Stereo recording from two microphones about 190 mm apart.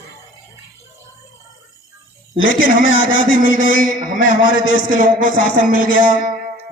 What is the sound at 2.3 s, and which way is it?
A man's voice, 80° left.